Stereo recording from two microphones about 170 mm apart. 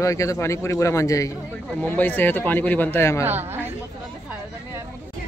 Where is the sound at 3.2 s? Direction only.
15° right (ahead or behind).